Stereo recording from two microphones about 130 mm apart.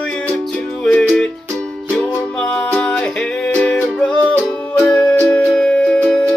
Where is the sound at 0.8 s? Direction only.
10° left (ahead or behind).